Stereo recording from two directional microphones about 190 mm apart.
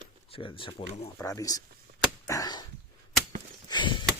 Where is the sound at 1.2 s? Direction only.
15° left (ahead or behind).